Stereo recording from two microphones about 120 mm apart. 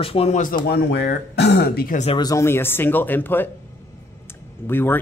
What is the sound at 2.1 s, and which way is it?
Speech, 30° left (ahead or behind).